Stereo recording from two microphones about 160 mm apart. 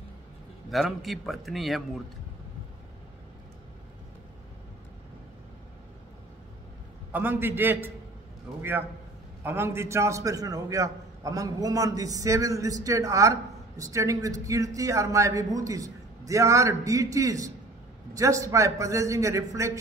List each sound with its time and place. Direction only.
0.7 s a man's voice: centre (ahead or behind)
7.1 s a man's voice: 10° right (ahead or behind)
9.4 s a man's voice: 15° right (ahead or behind)